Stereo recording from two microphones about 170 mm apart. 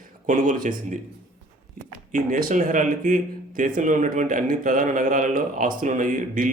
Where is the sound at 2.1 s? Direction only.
50° right (ahead or behind).